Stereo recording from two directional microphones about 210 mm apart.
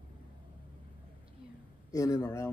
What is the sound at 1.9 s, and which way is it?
Speech, 15° left (ahead or behind).